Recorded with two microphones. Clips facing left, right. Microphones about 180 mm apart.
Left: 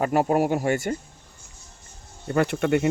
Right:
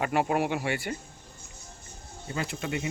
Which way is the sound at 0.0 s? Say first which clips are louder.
Left 5 dB; 40° left (ahead or behind).